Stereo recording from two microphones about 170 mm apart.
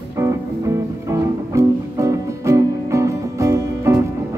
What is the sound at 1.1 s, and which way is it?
Music, 15° right (ahead or behind).